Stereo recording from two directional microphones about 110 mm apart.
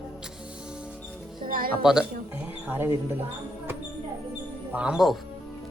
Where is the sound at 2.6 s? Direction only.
20° right (ahead or behind).